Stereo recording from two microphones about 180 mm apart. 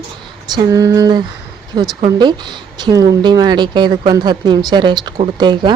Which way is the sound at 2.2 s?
25° right (ahead or behind).